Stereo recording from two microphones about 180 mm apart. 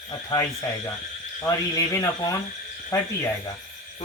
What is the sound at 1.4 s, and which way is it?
Speech, 20° left (ahead or behind).